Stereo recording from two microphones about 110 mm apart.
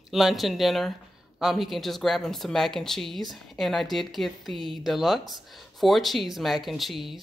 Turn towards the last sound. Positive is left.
turn(degrees=0)  # may be behind; listen again after turning